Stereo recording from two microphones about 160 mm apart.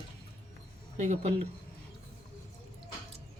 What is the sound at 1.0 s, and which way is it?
Speech, 45° right (ahead or behind).